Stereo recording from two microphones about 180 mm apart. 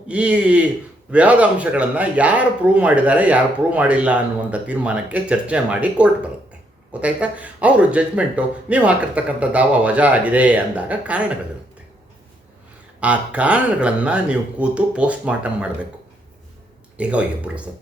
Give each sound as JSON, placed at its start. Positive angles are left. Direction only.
{"t": 0.1, "sound": "speech", "side_deg": -5}
{"t": 13.0, "sound": "speech", "side_deg": -5}
{"t": 17.0, "sound": "speech", "side_deg": -5}